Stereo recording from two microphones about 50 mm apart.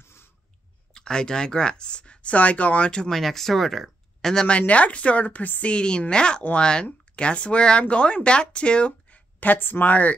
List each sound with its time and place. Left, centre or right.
0.0 s a sound: left
0.9 s speech: centre
2.9 s speech: centre
3.2 s speech: centre
4.5 s speech: left
5.7 s speech: centre
9.4 s speech: left